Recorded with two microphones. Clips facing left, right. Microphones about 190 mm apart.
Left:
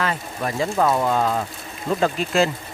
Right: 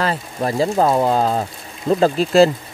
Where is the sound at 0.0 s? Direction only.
35° right (ahead or behind).